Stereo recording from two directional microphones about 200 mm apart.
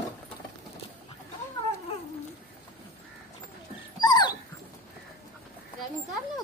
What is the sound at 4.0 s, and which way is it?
Dog, 20° left (ahead or behind).